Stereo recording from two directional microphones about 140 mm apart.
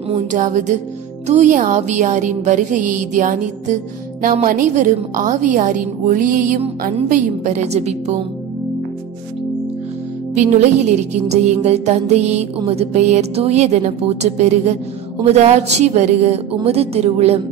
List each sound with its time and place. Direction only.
0.3 s speech: 65° right (ahead or behind)
4.2 s a woman's voice: 75° right (ahead or behind)
7.1 s music: 55° right (ahead or behind)
10.3 s music: 55° right (ahead or behind)